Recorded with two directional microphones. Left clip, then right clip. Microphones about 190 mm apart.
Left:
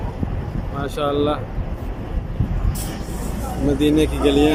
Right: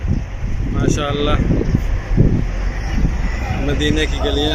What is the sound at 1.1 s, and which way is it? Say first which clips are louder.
Speech: even; 15° left (ahead or behind).